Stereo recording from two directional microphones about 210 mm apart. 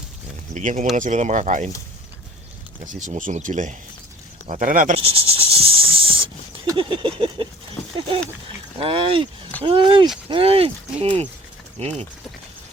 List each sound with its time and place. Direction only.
0.5 s speech: 35° right (ahead or behind)
2.8 s speech: 35° right (ahead or behind)
4.9 s snake: 25° right (ahead or behind)
7.4 s speech: 25° right (ahead or behind)